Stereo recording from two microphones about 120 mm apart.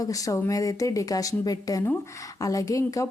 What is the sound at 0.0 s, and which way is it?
A woman's voice, 30° left (ahead or behind).